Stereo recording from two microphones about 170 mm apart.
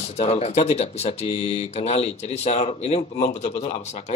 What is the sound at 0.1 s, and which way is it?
Speech, 40° left (ahead or behind).